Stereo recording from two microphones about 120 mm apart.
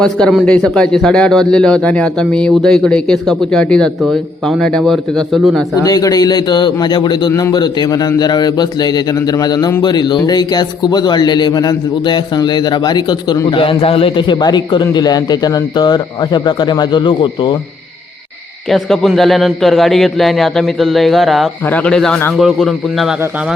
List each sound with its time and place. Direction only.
0.0 s a man's voice: 5° left (ahead or behind)
5.8 s speech: 30° left (ahead or behind)
18.7 s a man's voice: centre (ahead or behind)